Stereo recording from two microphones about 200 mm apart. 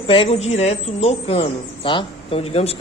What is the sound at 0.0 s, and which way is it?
A woman's voice, 25° left (ahead or behind).